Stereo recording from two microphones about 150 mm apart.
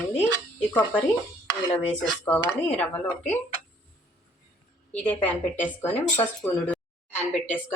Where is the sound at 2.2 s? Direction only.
10° left (ahead or behind).